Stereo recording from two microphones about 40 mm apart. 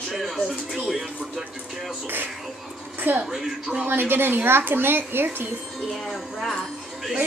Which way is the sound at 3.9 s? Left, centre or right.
Right.